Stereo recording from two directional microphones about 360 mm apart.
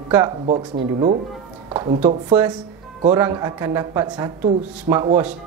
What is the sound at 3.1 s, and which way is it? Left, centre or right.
Speech, centre.